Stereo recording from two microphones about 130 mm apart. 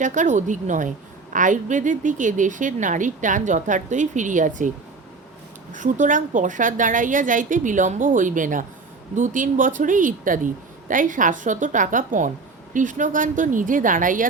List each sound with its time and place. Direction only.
0.0 s a woman's voice: 75° right (ahead or behind)
5.7 s a woman's voice: 75° right (ahead or behind)